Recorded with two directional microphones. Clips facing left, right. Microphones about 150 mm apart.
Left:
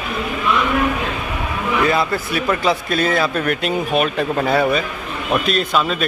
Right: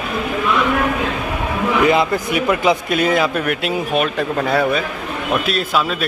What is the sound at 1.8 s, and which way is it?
A man's voice, 20° right (ahead or behind).